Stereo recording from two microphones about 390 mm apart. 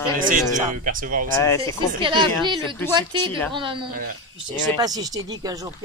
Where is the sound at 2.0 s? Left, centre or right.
Centre.